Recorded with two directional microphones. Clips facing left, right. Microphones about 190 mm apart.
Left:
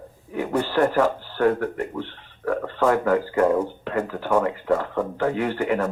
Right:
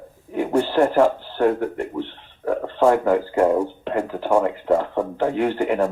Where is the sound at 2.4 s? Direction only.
20° right (ahead or behind).